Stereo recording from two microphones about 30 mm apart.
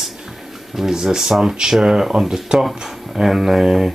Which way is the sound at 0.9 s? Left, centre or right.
Centre.